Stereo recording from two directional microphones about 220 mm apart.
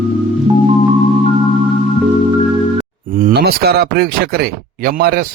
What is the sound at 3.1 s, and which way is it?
A man's voice, 40° right (ahead or behind).